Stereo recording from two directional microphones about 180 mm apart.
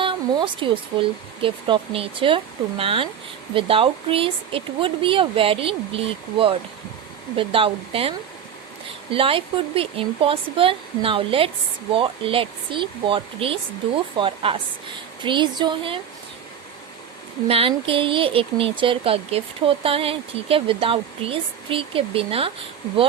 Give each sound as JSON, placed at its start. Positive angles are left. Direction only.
{"t": 0.0, "sound": "a sound", "side_deg": -25}
{"t": 1.4, "sound": "speech", "side_deg": -30}
{"t": 9.1, "sound": "speech", "side_deg": -30}
{"t": 17.5, "sound": "speech", "side_deg": -30}